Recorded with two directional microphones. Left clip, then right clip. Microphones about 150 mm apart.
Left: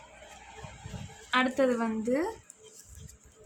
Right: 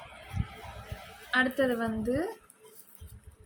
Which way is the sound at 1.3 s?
40° left (ahead or behind).